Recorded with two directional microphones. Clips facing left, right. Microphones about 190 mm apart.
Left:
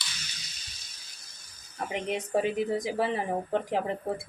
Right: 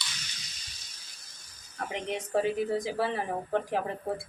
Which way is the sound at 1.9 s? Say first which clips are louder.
Left 2 dB; 15° left (ahead or behind).